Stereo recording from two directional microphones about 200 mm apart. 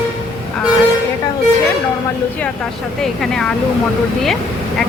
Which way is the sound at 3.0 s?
Centre (ahead or behind).